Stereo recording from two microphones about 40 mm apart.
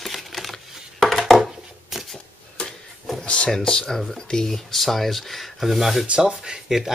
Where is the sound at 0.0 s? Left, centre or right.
Centre.